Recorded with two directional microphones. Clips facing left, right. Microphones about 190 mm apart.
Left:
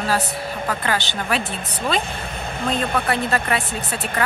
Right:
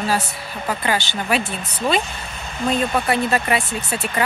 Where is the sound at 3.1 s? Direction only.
10° right (ahead or behind).